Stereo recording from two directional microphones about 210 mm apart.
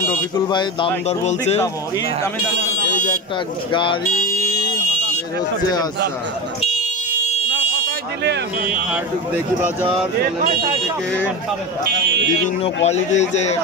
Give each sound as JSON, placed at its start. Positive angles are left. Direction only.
{"t": 0.5, "sound": "speech", "side_deg": 20}
{"t": 3.7, "sound": "speech", "side_deg": 25}
{"t": 12.6, "sound": "speech", "side_deg": 30}